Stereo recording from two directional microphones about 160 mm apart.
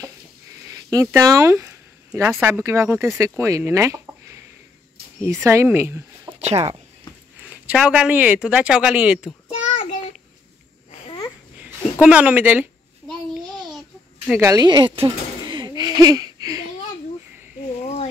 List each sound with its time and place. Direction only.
0.7 s speech: 20° right (ahead or behind)
6.4 s speech: 40° right (ahead or behind)
7.4 s speech: 5° right (ahead or behind)
9.5 s child singing: 40° left (ahead or behind)
11.5 s a sound: 10° right (ahead or behind)
14.3 s a sound: 20° right (ahead or behind)